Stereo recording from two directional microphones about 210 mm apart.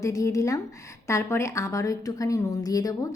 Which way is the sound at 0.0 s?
15° left (ahead or behind).